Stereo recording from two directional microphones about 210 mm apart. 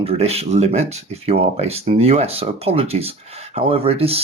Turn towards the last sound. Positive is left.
turn(degrees=-30)  # may be behind; listen again after turning